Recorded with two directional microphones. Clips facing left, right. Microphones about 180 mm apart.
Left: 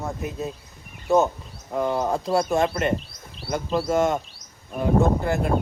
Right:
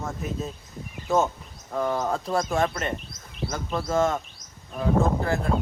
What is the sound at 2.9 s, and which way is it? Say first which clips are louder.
Bird: left 7 dB; 35° left (ahead or behind).